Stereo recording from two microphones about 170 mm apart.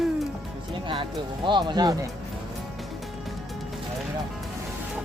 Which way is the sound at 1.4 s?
25° right (ahead or behind).